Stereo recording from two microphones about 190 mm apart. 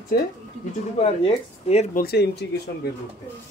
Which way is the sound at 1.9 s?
55° left (ahead or behind).